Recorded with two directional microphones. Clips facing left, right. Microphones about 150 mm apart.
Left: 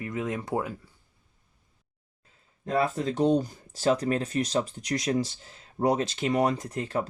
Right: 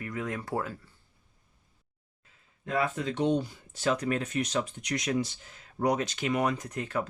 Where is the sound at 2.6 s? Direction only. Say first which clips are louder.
Left 3 dB; 35° left (ahead or behind).